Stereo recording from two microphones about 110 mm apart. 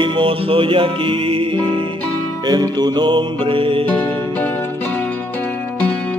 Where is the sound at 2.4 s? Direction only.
40° right (ahead or behind).